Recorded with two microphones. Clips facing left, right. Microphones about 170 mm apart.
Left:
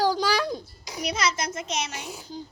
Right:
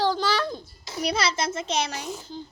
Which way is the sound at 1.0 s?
30° right (ahead or behind).